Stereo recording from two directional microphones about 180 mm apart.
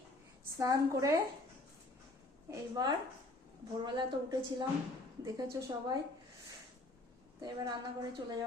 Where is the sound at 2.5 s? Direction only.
20° right (ahead or behind).